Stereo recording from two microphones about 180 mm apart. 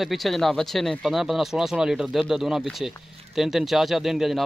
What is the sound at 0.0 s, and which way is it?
Speech, centre (ahead or behind).